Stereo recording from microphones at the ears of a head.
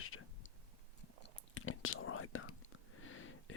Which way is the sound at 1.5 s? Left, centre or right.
Left.